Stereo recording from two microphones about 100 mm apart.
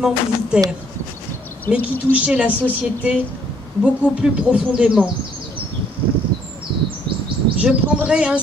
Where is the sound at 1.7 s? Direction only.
15° right (ahead or behind).